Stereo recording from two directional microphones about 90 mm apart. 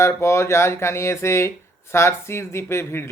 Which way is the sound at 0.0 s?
30° left (ahead or behind).